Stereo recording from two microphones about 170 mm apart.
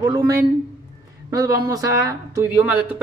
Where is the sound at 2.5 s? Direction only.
10° right (ahead or behind).